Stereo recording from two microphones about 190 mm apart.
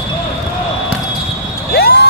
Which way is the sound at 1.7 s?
55° left (ahead or behind).